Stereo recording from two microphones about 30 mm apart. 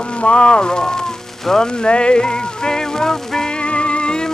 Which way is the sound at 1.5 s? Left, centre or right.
Left.